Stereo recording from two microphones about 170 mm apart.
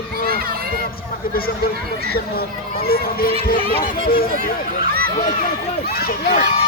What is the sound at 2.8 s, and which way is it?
Speech, 60° left (ahead or behind).